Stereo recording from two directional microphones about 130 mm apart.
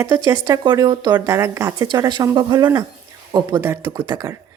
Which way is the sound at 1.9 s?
35° right (ahead or behind).